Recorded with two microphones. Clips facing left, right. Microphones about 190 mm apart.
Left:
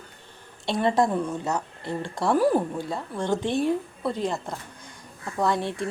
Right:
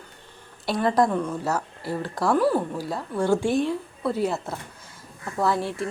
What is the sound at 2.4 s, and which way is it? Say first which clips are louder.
Speech: left 2 dB; 20° left (ahead or behind).